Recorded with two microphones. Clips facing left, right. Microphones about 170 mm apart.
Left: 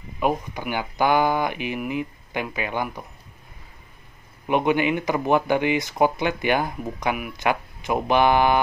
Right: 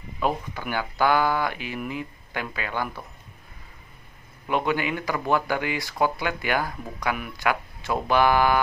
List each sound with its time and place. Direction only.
0.2 s speech: 15° left (ahead or behind)
4.5 s speech: 20° left (ahead or behind)